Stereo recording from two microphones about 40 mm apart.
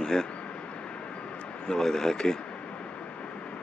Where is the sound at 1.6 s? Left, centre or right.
Centre.